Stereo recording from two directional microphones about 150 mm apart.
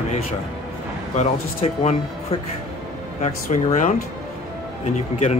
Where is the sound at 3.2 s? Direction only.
55° left (ahead or behind).